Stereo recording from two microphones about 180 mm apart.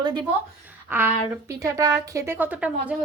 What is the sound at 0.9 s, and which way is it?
A woman's voice, 10° right (ahead or behind).